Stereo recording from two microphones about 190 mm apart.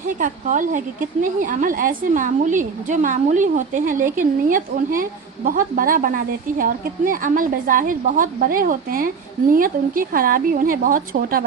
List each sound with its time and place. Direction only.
0.2 s a woman's voice: 45° right (ahead or behind)